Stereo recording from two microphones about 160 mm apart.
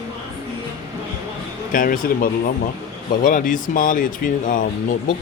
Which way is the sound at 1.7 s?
60° left (ahead or behind).